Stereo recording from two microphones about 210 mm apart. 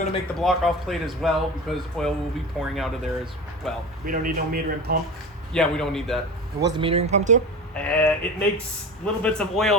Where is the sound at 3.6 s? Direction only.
Centre (ahead or behind).